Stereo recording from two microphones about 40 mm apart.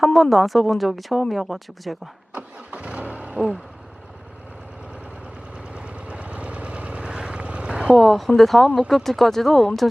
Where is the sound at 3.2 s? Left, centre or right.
Right.